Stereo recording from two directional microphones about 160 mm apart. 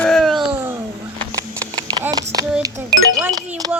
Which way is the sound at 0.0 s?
Centre (ahead or behind).